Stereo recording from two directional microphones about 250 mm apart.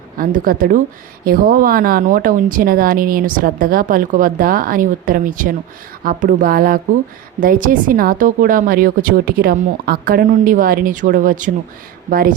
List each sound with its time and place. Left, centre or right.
0.2 s speech: right